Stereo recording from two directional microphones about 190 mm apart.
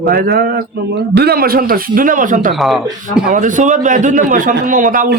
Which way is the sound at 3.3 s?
40° right (ahead or behind).